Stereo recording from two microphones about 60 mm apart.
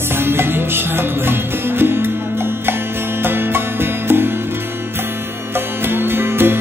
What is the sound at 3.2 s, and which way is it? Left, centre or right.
Music, right.